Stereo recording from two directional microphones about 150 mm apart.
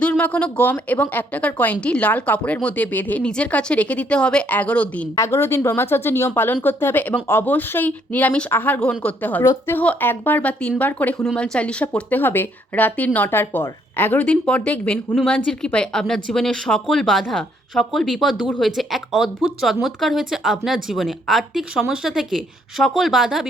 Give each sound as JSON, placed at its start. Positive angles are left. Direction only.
{"t": 0.0, "sound": "a woman's voice", "side_deg": 10}